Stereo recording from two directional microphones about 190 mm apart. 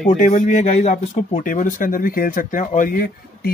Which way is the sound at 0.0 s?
45° left (ahead or behind).